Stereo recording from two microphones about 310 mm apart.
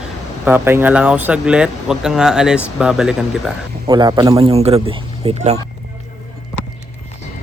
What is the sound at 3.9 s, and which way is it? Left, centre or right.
Speech, centre.